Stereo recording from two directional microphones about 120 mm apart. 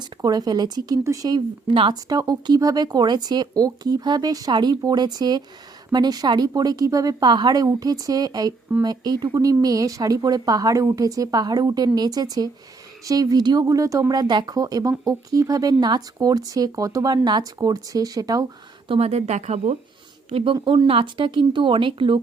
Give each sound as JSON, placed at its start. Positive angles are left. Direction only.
{"t": 0.0, "sound": "a woman's voice", "side_deg": -35}
{"t": 1.7, "sound": "speech", "side_deg": -45}
{"t": 2.0, "sound": "a woman's voice", "side_deg": -35}
{"t": 18.9, "sound": "a woman's voice", "side_deg": -60}
{"t": 20.3, "sound": "speech", "side_deg": -45}